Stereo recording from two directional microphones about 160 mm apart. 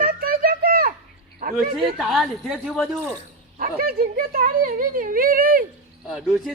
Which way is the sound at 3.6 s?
65° right (ahead or behind).